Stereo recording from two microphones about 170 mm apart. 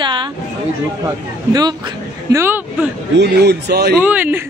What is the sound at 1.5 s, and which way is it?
Speech, 25° right (ahead or behind).